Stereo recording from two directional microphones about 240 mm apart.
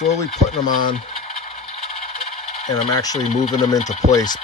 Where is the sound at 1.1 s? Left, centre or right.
Left.